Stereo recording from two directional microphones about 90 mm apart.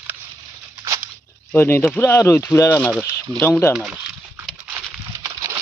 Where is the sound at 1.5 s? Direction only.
25° left (ahead or behind).